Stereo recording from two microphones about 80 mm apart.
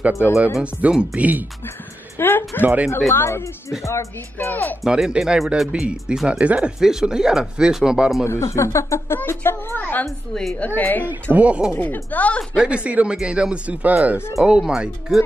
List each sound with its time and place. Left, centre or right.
0.6 s speech: centre
2.1 s a woman's voice: left
2.6 s a woman's voice: right
3.1 s a woman's voice: left
4.8 s speech: centre
8.3 s a woman's voice: left
10.0 s a woman's voice: centre
10.5 s a woman's voice: centre
11.3 s speech: centre
11.7 s a woman's voice: left
12.5 s speech: centre